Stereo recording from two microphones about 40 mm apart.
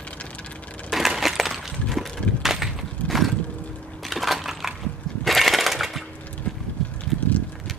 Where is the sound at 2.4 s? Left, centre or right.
Centre.